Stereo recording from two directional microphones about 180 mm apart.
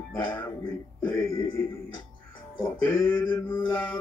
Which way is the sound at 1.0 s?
15° left (ahead or behind).